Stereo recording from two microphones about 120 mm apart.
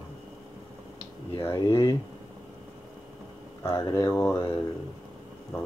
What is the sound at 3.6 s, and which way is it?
Speech, 25° left (ahead or behind).